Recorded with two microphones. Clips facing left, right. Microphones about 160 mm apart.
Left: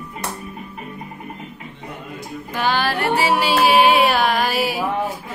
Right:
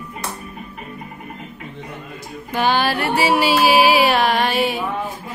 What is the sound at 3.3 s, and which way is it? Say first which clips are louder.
Music: right 1 dB; 5° right (ahead or behind).